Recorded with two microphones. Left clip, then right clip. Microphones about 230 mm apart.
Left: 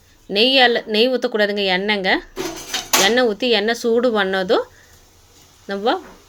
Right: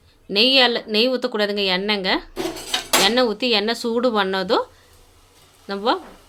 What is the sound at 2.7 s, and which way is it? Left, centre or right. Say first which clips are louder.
Dishes: left 2 dB; centre.